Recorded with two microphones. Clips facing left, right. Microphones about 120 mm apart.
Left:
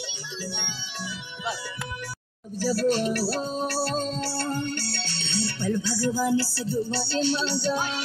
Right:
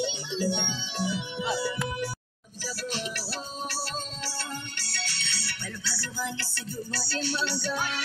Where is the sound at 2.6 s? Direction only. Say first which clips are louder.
Left 11 dB; 45° left (ahead or behind).